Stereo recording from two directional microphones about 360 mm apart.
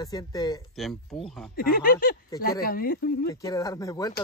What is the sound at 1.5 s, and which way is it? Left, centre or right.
Speech, left.